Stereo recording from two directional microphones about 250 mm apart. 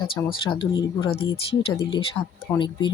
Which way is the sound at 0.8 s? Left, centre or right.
Left.